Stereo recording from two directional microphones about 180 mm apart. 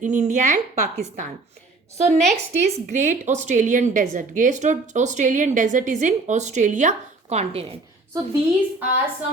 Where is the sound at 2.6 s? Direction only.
40° right (ahead or behind).